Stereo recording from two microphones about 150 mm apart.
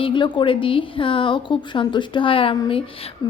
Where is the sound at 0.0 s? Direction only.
30° left (ahead or behind).